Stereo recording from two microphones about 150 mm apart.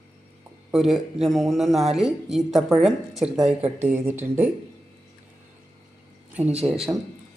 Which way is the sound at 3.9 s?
15° right (ahead or behind).